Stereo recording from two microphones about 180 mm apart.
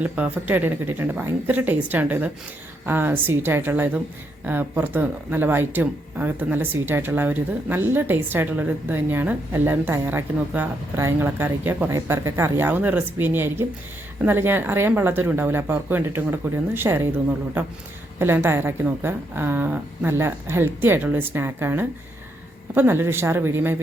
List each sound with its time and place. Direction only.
0.0 s speech: 10° right (ahead or behind)